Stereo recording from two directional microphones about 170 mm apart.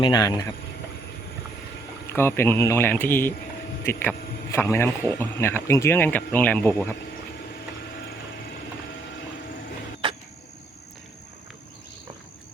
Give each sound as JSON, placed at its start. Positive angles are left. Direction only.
{"t": 0.0, "sound": "speech", "side_deg": 25}
{"t": 2.1, "sound": "speech", "side_deg": 15}
{"t": 4.5, "sound": "speech", "side_deg": 15}
{"t": 10.0, "sound": "a sound", "side_deg": -30}